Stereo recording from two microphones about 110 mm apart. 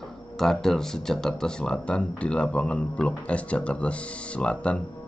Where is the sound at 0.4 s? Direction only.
5° left (ahead or behind).